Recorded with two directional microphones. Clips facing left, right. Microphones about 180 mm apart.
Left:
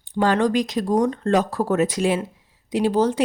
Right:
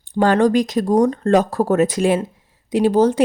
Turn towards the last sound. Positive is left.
turn(degrees=-45)  # may be behind; listen again after turning